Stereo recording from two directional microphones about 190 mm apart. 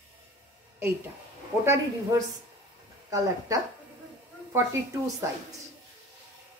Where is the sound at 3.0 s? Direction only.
15° right (ahead or behind).